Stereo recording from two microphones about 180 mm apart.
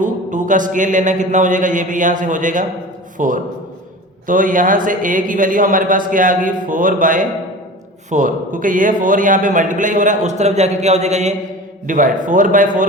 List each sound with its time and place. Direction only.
0.0 s a man's voice: 45° right (ahead or behind)